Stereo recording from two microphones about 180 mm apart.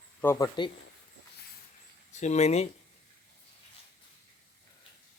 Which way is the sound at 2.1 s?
40° left (ahead or behind).